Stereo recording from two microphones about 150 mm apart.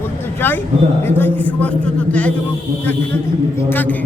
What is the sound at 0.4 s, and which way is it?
A man's voice, 15° left (ahead or behind).